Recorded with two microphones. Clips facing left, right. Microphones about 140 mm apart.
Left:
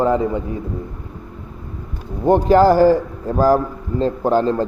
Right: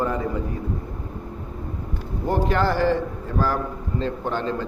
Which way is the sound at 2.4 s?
35° left (ahead or behind).